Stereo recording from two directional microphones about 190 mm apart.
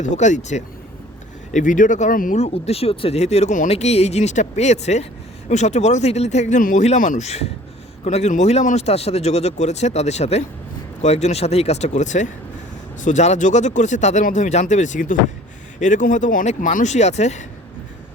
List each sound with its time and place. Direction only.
0.0 s speech: 40° left (ahead or behind)